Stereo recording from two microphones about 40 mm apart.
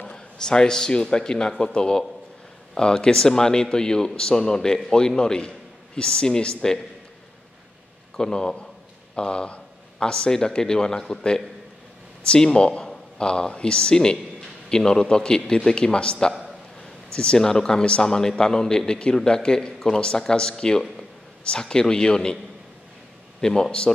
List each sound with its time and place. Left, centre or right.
0.0 s a sound: centre
1.1 s a man's voice: centre
8.2 s a man's voice: centre
12.3 s a man's voice: left
23.4 s a man's voice: centre